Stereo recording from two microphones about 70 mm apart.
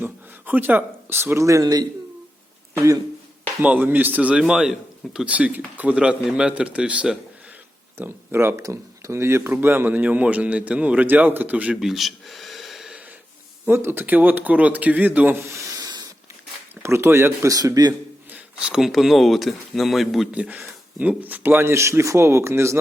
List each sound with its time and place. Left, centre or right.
0.0 s speech: right
1.6 s speech: right
3.6 s a man's voice: right; by 5.3 s centre
5.3 s a man's voice: right
7.9 s speech: right
9.5 s a man's voice: right
11.8 s gasp: centre
13.7 s a man's voice: right
15.4 s speech: right
15.7 s a sound: right
16.8 s speech: right
18.3 s speech: centre
20.3 s speech: centre; by 22.8 s right